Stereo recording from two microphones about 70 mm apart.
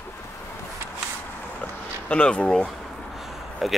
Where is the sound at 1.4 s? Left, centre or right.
Left.